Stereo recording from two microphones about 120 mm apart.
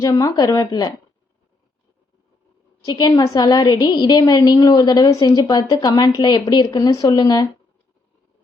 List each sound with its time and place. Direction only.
0.0 s a woman's voice: 30° left (ahead or behind)
2.8 s a woman's voice: 35° left (ahead or behind)